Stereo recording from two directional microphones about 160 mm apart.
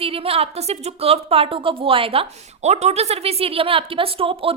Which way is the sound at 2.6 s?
45° right (ahead or behind).